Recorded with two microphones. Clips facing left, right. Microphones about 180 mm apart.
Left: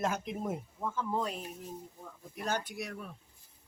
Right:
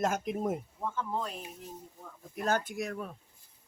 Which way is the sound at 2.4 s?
45° right (ahead or behind).